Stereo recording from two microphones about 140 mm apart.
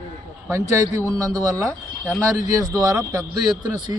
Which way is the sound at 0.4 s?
20° right (ahead or behind).